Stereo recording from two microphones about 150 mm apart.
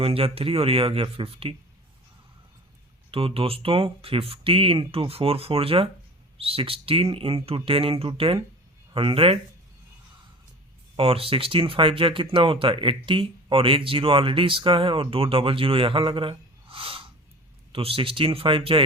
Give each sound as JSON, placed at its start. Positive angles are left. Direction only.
{"t": 0.0, "sound": "speech", "side_deg": -40}
{"t": 3.1, "sound": "speech", "side_deg": -40}
{"t": 10.9, "sound": "speech", "side_deg": -40}